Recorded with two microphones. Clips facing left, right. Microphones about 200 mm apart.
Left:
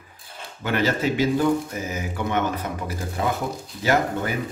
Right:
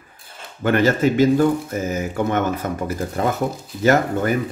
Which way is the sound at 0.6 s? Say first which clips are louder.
Right 6 dB; 50° right (ahead or behind).